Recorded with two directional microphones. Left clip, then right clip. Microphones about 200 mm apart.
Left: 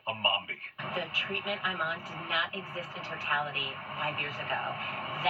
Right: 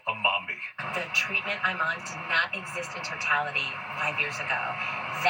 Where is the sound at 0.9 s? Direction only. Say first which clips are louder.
Right 5 dB; 5° right (ahead or behind).